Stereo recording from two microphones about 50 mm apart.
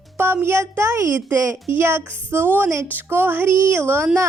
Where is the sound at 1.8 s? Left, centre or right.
Right.